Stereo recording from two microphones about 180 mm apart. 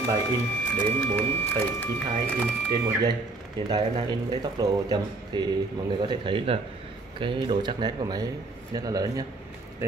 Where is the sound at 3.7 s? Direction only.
25° right (ahead or behind).